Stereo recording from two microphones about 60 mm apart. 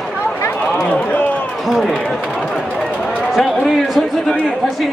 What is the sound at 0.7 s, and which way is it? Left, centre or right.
Run, left.